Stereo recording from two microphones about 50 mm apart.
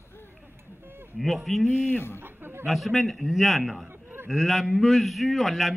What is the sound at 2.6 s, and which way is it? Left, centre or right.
A man's voice, centre.